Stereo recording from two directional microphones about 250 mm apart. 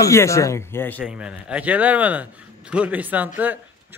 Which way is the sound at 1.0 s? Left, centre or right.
Centre.